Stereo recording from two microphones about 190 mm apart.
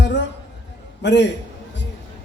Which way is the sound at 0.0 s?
70° left (ahead or behind).